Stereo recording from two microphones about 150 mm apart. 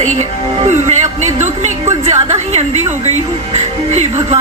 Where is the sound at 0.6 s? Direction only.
50° right (ahead or behind).